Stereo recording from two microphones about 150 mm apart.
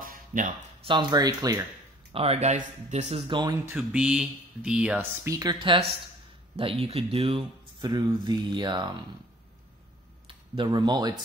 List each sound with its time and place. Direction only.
0.0 s a sound: 65° right (ahead or behind)
0.8 s speech: 30° right (ahead or behind)
2.1 s speech: 45° right (ahead or behind)
3.3 s speech: 30° right (ahead or behind)
3.6 s speech: 5° right (ahead or behind)
5.3 s speech: 25° right (ahead or behind)
10.2 s a sound: 35° right (ahead or behind)
10.9 s speech: 25° right (ahead or behind)